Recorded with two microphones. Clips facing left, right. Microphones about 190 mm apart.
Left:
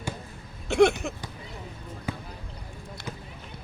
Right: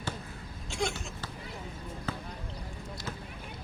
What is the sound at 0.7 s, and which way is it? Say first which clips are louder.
Speech: left 14 dB; 65° left (ahead or behind).